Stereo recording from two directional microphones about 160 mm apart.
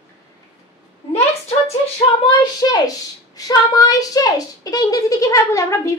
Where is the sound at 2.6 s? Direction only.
25° left (ahead or behind).